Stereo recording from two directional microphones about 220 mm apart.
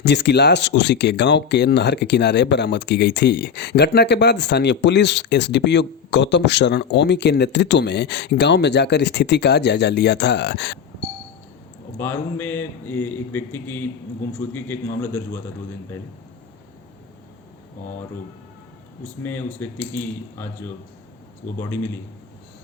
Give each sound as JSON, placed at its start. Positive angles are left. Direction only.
{"t": 0.0, "sound": "speech", "side_deg": 50}
{"t": 11.9, "sound": "a man's voice", "side_deg": 10}
{"t": 19.2, "sound": "a man's voice", "side_deg": 10}